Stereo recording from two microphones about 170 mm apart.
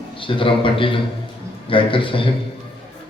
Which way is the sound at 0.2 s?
30° left (ahead or behind).